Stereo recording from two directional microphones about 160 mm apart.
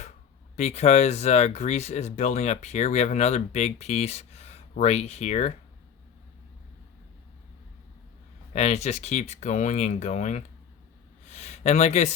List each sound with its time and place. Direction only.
0.5 s speech: 45° left (ahead or behind)
8.5 s speech: 45° left (ahead or behind)
11.3 s a sound: 45° left (ahead or behind)